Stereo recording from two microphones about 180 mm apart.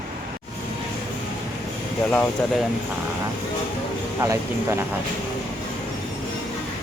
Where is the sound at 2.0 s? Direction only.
5° left (ahead or behind).